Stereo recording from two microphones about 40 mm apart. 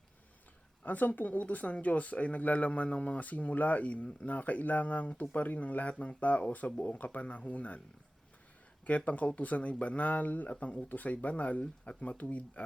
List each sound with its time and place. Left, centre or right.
0.9 s speech: left
8.9 s speech: left